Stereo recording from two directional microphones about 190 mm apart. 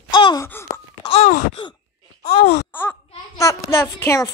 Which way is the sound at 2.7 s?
10° left (ahead or behind).